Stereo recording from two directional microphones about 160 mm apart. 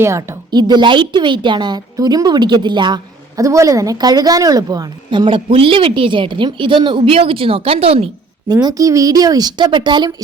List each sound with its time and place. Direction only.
0.0 s a woman's voice: 15° right (ahead or behind); by 8.0 s 40° right (ahead or behind)
8.6 s a woman's voice: 20° right (ahead or behind)